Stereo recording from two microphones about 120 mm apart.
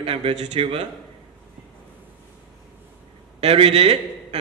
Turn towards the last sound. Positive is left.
turn(degrees=-60)  # may be behind; listen again after turning